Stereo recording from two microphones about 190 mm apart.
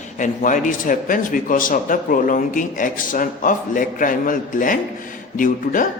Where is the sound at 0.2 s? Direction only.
40° left (ahead or behind).